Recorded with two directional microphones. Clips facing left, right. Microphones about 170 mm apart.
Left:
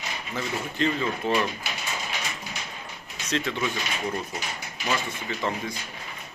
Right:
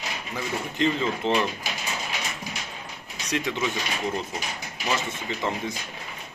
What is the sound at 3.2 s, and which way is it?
Speech, 15° right (ahead or behind).